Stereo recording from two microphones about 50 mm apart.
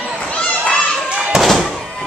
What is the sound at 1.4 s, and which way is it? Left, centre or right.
Thunk, centre.